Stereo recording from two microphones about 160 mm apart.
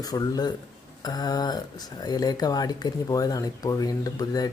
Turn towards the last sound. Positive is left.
turn(degrees=25)  # may be behind; listen again after turning